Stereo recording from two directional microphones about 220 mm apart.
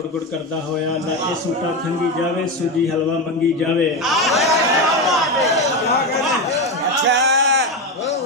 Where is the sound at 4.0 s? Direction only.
Centre (ahead or behind).